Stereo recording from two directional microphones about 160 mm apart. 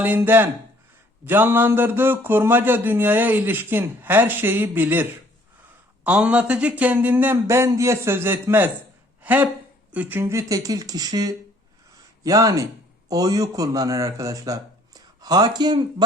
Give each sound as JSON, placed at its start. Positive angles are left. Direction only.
{"t": 0.0, "sound": "speech", "side_deg": -10}
{"t": 6.1, "sound": "speech", "side_deg": -10}